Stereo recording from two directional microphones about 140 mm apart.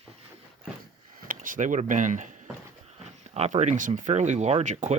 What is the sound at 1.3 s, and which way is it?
Speech, 70° right (ahead or behind).